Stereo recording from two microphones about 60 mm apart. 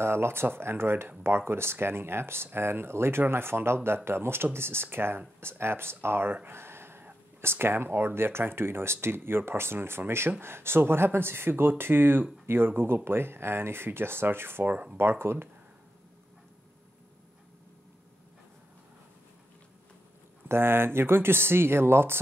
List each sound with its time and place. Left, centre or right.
0.0 s speech: right
6.3 s a sound: right
7.4 s speech: right
15.0 s speech: right
20.4 s speech: right